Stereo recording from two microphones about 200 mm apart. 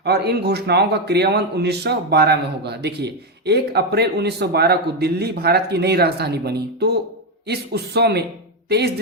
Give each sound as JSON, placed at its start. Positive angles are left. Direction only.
{"t": 0.0, "sound": "a man's voice", "side_deg": -55}